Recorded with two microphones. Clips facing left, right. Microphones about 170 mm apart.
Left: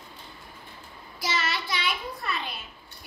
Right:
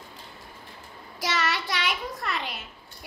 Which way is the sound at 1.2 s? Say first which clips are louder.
Right 2 dB; 80° right.